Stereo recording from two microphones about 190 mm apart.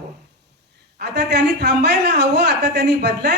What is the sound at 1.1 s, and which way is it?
Speech, 60° right (ahead or behind).